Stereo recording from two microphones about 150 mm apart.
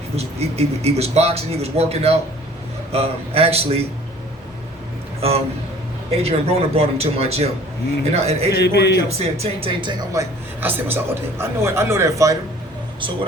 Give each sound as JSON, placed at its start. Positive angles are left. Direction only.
{"t": 0.2, "sound": "a man's voice", "side_deg": -45}
{"t": 6.1, "sound": "speech", "side_deg": -40}
{"t": 8.5, "sound": "a man's voice", "side_deg": 90}
{"t": 9.0, "sound": "speech", "side_deg": -45}